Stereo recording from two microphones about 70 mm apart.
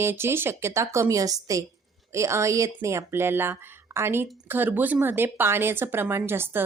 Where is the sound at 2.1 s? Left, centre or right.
Right.